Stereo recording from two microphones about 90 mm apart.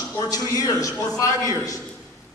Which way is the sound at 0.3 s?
40° left (ahead or behind).